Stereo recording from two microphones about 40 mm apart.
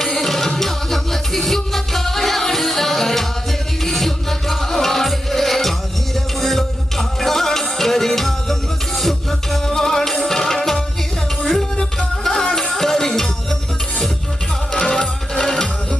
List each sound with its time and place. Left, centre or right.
0.0 s music: centre
14.7 s music: centre